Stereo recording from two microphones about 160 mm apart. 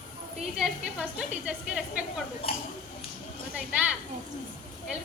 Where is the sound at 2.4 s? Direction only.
35° left (ahead or behind).